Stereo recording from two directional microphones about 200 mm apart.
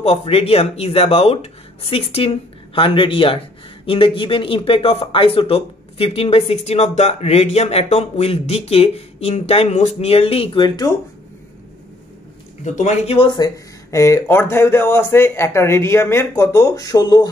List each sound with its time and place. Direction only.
0.0 s speech: 30° left (ahead or behind)
12.6 s speech: 35° left (ahead or behind)
13.8 s speech: 15° left (ahead or behind)